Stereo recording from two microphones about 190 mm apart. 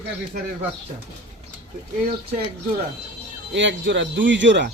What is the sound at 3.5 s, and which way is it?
Speech, 75° right (ahead or behind).